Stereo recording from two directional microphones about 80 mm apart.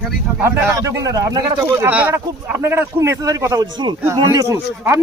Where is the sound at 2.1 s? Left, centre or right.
Right.